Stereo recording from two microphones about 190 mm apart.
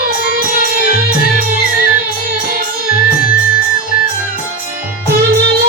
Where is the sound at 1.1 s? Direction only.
50° right (ahead or behind).